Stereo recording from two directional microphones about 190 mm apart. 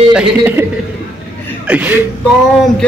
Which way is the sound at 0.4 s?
10° right (ahead or behind).